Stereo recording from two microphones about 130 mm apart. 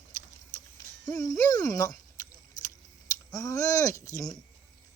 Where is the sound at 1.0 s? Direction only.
30° left (ahead or behind).